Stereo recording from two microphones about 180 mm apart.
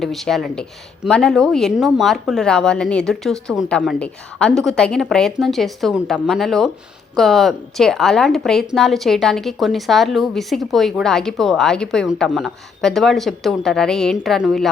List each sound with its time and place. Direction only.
0.0 s a woman's voice: centre (ahead or behind)